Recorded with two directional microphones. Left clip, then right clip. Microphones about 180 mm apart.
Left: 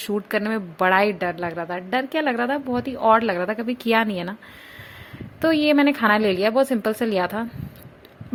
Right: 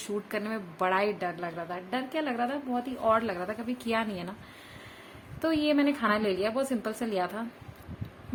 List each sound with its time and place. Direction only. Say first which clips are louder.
0.0 s speech: left 9 dB; 45° left (ahead or behind)
5.4 s speech: left 9 dB; 45° left (ahead or behind)